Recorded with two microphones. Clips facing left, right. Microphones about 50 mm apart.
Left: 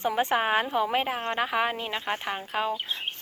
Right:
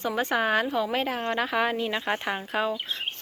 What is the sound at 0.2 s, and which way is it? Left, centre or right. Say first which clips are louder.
A woman's voice: right 1 dB; left.